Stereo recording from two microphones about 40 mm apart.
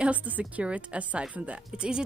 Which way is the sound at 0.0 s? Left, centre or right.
Right.